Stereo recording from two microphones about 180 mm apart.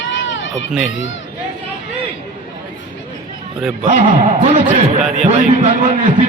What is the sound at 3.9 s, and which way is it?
A man's voice, 40° right (ahead or behind).